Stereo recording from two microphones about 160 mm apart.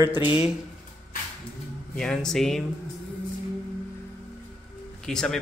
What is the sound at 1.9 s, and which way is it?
Speech, 5° left (ahead or behind).